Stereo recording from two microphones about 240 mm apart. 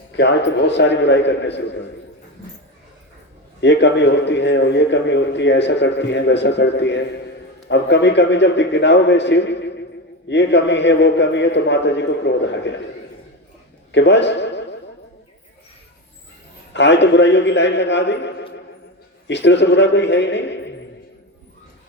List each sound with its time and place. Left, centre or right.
0.2 s a man's voice: left
3.6 s a man's voice: left
13.9 s a man's voice: left
16.7 s a man's voice: left
19.3 s a man's voice: left